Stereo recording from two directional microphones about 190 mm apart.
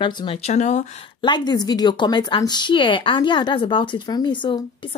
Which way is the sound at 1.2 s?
25° left (ahead or behind).